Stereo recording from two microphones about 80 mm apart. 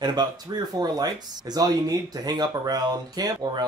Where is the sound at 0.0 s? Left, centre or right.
Right.